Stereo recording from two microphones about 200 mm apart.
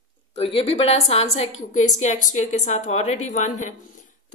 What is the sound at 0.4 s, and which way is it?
Speech, 30° left (ahead or behind).